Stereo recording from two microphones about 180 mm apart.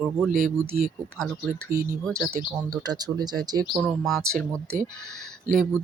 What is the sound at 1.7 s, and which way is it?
Speech, 50° right (ahead or behind).